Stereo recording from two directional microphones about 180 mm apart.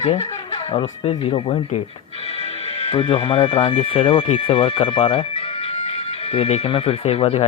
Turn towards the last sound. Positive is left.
turn(degrees=35)  # may be behind; listen again after turning